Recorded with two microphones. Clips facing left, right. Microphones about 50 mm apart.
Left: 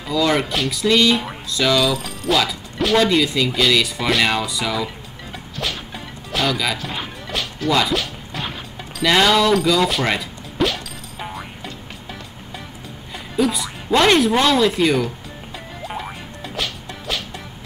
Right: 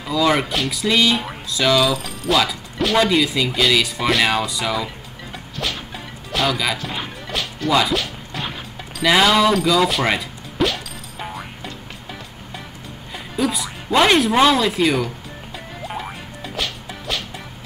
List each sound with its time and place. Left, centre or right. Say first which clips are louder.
0.0 s speech: right 1 dB; centre
5.6 s music: even; centre
13.4 s speech: left 2 dB; centre
15.8 s music: even; centre